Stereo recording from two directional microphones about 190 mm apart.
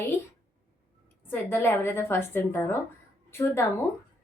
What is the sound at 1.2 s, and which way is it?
Speech, 10° left (ahead or behind).